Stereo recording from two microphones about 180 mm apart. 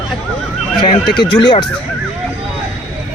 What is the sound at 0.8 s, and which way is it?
Speech, 25° left (ahead or behind).